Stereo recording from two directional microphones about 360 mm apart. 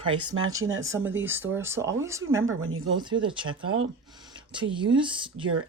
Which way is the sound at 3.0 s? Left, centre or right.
Centre.